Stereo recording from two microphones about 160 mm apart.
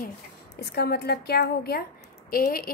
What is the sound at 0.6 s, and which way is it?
A woman's voice, 90° left.